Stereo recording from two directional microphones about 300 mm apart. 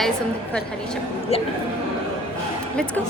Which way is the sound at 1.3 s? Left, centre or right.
Left.